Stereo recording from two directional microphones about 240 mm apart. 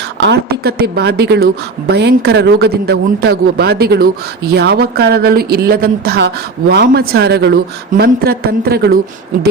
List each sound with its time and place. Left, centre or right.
0.2 s a man's voice: right